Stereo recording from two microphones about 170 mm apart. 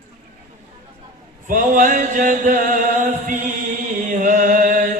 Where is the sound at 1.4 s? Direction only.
50° right (ahead or behind).